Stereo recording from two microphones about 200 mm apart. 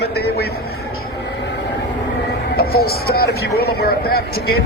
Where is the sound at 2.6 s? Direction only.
50° left (ahead or behind).